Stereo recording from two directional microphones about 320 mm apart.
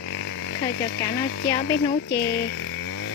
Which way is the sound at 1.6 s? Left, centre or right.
Left.